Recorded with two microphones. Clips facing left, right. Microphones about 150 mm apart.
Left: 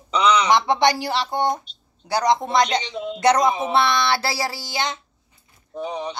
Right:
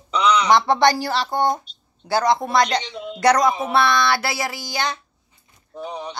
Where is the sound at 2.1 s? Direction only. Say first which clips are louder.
Right 1 dB; 20° left (ahead or behind).